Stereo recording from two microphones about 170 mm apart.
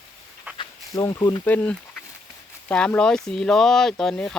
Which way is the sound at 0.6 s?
20° left (ahead or behind).